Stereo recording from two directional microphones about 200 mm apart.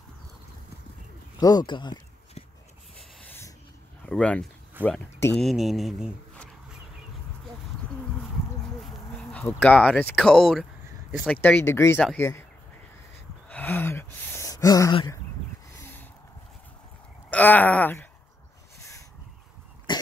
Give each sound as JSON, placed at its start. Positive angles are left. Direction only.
{"t": 1.4, "sound": "speech", "side_deg": 20}
{"t": 3.0, "sound": "a sound", "side_deg": 10}
{"t": 4.0, "sound": "speech", "side_deg": 5}
{"t": 9.3, "sound": "speech", "side_deg": 10}
{"t": 11.4, "sound": "speech", "side_deg": 10}
{"t": 13.5, "sound": "a sound", "side_deg": 10}
{"t": 17.3, "sound": "speech", "side_deg": 10}
{"t": 18.8, "sound": "crow", "side_deg": 15}
{"t": 19.9, "sound": "cough", "side_deg": 20}